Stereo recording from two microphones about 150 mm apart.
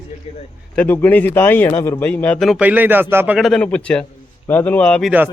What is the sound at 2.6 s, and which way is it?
Speech, 10° right (ahead or behind).